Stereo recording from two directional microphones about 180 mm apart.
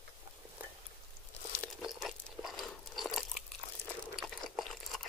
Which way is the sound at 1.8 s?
Centre (ahead or behind).